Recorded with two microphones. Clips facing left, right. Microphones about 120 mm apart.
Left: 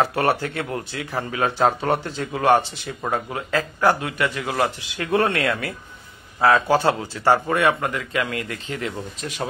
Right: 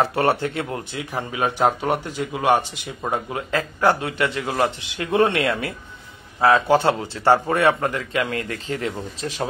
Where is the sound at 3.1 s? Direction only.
25° right (ahead or behind).